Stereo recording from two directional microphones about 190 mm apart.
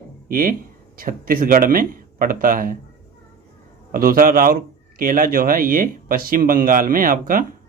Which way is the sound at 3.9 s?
50° right (ahead or behind).